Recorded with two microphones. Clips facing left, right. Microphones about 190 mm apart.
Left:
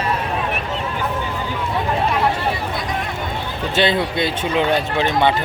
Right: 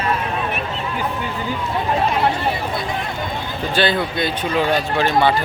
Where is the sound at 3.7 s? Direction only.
25° left (ahead or behind).